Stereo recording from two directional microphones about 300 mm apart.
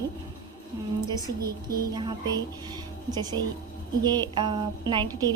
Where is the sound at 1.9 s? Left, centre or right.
Centre.